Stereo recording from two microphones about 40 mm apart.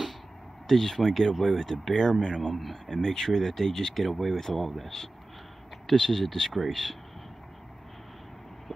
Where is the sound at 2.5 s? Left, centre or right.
Centre.